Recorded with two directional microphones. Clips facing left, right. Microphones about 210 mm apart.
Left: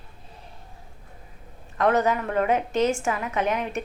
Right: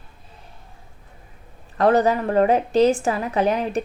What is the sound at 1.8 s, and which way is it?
A woman's voice, 35° right (ahead or behind).